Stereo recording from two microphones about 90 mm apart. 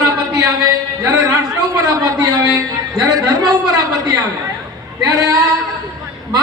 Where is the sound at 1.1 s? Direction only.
45° right (ahead or behind).